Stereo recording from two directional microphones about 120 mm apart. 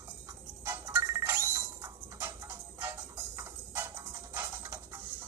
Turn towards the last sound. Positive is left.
turn(degrees=-20)  # may be behind; listen again after turning